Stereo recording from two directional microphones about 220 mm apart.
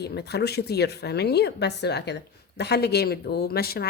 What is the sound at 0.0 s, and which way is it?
Speech, 50° left (ahead or behind).